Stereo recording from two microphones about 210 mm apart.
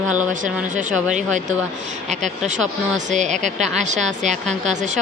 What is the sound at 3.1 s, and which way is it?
Speech, 35° right (ahead or behind).